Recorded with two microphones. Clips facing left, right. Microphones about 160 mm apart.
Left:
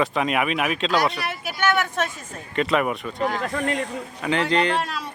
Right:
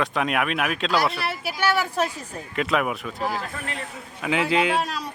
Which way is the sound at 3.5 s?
40° left (ahead or behind).